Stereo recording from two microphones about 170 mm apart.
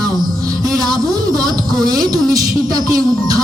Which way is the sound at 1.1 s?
20° right (ahead or behind).